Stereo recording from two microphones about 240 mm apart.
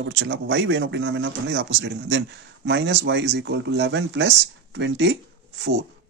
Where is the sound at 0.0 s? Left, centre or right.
Right.